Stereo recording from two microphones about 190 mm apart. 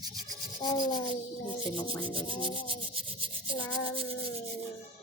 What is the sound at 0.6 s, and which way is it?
Rub, 20° left (ahead or behind).